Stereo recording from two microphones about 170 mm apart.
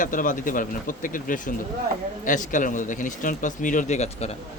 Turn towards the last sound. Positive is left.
turn(degrees=40)  # may be behind; listen again after turning